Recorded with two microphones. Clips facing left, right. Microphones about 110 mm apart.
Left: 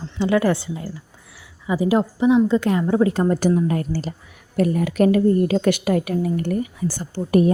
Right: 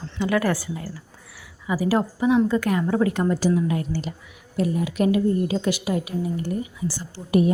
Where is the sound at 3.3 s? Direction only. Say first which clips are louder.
Left 3 dB; 45° left (ahead or behind).